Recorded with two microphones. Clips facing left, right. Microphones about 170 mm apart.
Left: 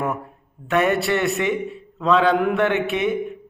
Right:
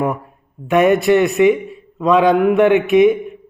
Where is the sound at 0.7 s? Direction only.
15° right (ahead or behind).